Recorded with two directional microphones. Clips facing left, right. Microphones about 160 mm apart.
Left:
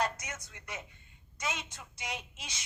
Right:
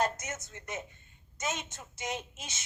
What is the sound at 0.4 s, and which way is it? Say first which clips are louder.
A woman's voice: right 4 dB; 50° right (ahead or behind).